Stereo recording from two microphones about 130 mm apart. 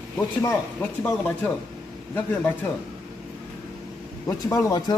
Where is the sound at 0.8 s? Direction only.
15° left (ahead or behind).